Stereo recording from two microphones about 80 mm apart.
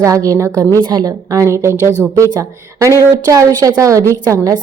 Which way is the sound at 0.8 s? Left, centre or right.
Right.